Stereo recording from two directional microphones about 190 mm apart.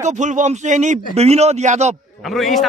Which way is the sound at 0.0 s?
40° right (ahead or behind).